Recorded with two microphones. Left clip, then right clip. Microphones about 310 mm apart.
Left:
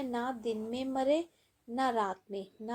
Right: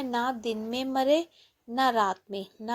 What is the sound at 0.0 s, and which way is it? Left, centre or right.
A woman's voice, right.